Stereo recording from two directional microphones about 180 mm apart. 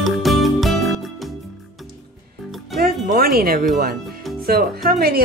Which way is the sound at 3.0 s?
55° right (ahead or behind).